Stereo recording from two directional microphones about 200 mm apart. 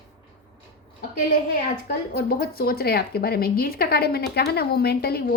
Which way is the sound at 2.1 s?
50° left (ahead or behind).